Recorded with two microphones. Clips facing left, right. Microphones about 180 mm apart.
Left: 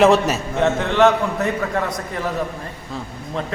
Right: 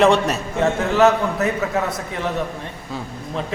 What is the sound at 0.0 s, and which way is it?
A man's voice, centre (ahead or behind).